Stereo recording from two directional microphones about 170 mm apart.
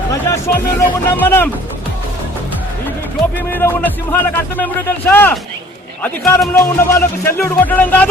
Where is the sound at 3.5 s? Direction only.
10° left (ahead or behind).